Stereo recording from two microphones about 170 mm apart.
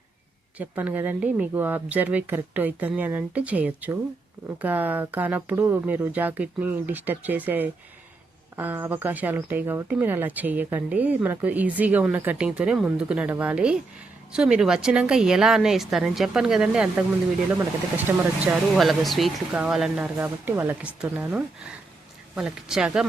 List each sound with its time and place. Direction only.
0.6 s a woman's voice: 10° right (ahead or behind)
18.4 s a woman's voice: centre (ahead or behind)